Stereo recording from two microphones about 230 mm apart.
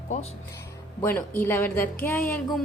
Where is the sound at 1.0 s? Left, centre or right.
Centre.